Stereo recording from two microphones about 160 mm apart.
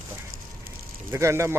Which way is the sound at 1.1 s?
15° right (ahead or behind).